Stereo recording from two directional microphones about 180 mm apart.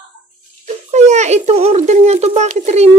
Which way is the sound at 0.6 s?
40° right (ahead or behind).